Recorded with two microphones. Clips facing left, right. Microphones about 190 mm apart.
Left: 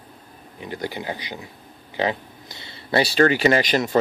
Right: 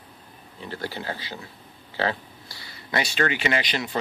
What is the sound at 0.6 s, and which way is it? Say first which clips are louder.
Speech: left 3 dB; 15° left (ahead or behind).